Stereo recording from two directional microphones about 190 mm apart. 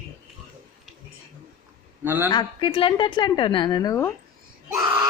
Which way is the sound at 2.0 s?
10° right (ahead or behind).